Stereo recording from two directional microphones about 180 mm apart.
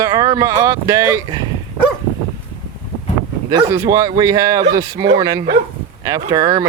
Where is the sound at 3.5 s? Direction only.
20° right (ahead or behind).